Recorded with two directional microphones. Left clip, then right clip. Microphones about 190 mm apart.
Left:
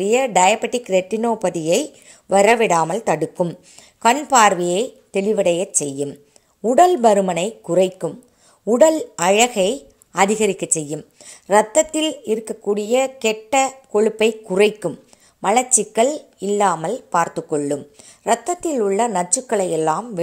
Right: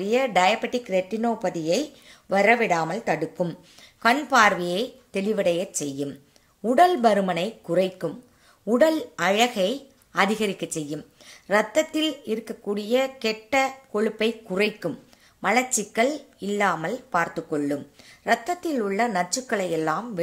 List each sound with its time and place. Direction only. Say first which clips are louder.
0.0 s speech: left 6 dB; 35° left (ahead or behind)